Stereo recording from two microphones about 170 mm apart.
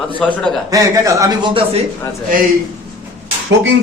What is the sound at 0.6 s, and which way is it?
Speech, 20° right (ahead or behind).